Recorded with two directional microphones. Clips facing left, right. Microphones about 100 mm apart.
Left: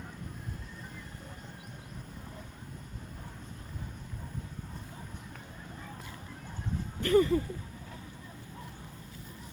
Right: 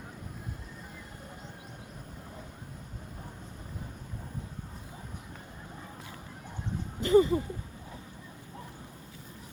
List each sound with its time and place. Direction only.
7.0 s speech: 20° right (ahead or behind)